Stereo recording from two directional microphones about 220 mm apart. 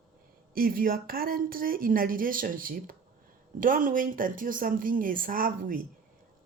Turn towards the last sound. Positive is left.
turn(degrees=-40)  # may be behind; listen again after turning